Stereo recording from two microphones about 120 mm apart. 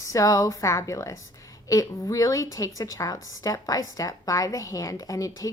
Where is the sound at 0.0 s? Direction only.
30° left (ahead or behind).